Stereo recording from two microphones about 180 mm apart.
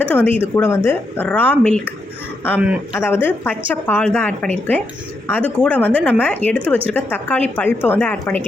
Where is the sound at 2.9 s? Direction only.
15° left (ahead or behind).